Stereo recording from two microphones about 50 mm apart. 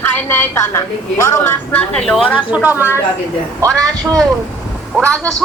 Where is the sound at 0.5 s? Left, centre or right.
Left.